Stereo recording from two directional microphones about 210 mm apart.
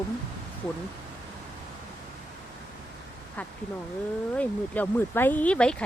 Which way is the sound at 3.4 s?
5° left (ahead or behind).